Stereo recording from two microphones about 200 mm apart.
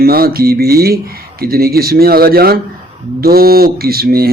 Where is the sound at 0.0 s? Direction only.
50° right (ahead or behind).